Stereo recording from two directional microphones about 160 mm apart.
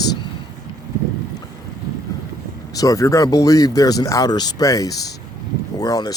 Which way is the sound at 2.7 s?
20° left (ahead or behind).